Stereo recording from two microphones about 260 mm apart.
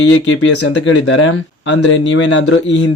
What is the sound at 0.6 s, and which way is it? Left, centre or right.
Speech, left.